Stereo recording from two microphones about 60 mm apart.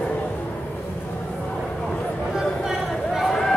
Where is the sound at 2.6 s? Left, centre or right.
Centre.